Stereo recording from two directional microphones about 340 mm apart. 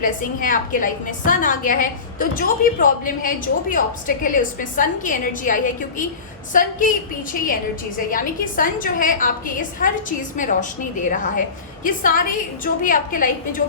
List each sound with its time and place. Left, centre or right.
0.0 s a woman's voice: left